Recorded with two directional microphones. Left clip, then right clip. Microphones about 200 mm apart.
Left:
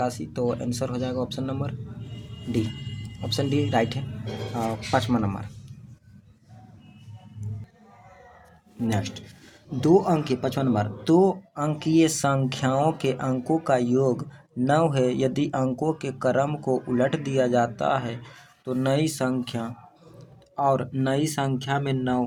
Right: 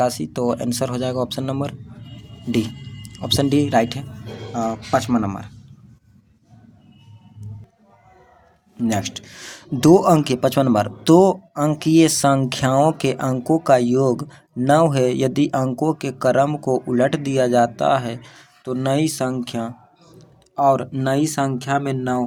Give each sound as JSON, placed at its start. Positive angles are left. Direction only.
{"t": 0.0, "sound": "speech", "side_deg": -35}
{"t": 8.9, "sound": "speech", "side_deg": -30}